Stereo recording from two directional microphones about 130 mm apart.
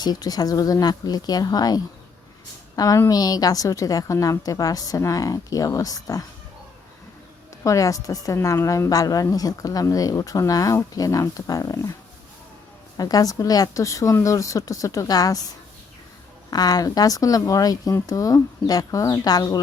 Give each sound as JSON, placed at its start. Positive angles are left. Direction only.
{"t": 0.0, "sound": "a woman's voice", "side_deg": 30}
{"t": 7.6, "sound": "a woman's voice", "side_deg": 25}
{"t": 13.0, "sound": "a woman's voice", "side_deg": 30}
{"t": 16.5, "sound": "a woman's voice", "side_deg": 30}